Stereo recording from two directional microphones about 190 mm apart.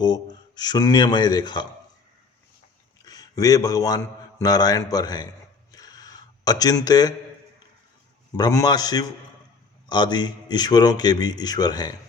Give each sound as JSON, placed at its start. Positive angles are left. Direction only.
{"t": 0.0, "sound": "a man's voice", "side_deg": 20}
{"t": 3.1, "sound": "a man's voice", "side_deg": 20}
{"t": 5.7, "sound": "a sound", "side_deg": 20}
{"t": 8.4, "sound": "a man's voice", "side_deg": 20}